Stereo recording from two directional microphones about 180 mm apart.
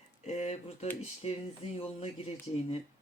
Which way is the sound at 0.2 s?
40° left (ahead or behind).